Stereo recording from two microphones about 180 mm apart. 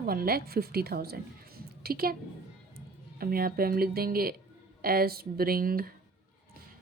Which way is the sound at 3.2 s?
55° right (ahead or behind).